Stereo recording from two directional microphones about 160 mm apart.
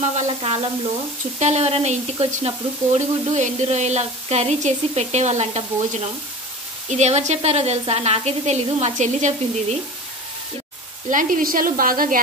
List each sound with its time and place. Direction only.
0.0 s sizzle: 45° right (ahead or behind)
11.1 s a woman's voice: 55° right (ahead or behind)